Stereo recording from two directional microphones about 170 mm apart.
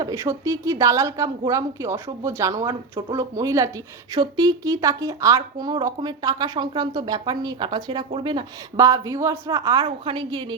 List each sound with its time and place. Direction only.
0.0 s a woman's voice: 20° right (ahead or behind)